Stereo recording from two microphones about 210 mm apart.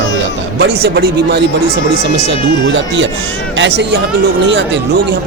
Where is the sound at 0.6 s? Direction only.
50° right (ahead or behind).